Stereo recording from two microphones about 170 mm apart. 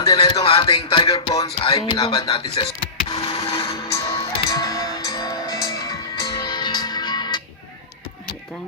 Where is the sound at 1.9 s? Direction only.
25° left (ahead or behind).